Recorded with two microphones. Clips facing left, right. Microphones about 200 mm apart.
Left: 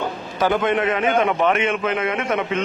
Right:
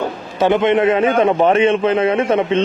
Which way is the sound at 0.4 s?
25° right (ahead or behind).